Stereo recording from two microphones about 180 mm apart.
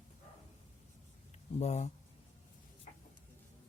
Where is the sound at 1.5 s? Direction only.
40° left (ahead or behind).